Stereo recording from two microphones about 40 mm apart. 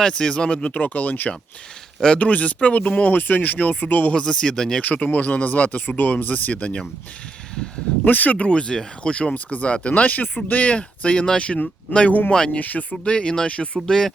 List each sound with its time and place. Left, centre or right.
0.0 s speech: centre; by 3.1 s left
3.1 s speech: left
4.1 s speech: left
4.8 s speech: left
8.0 s speech: left
8.4 s speech: left
9.3 s speech: left
12.0 s speech: left
13.1 s speech: left
13.8 s speech: centre